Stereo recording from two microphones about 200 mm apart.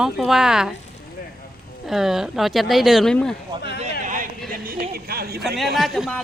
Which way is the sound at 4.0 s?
40° right (ahead or behind).